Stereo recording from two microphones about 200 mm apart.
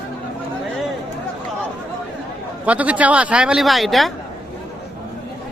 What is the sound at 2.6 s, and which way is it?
A man's voice, 5° right (ahead or behind).